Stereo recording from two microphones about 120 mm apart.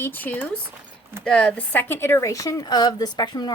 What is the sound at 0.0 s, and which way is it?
Speech, 15° left (ahead or behind).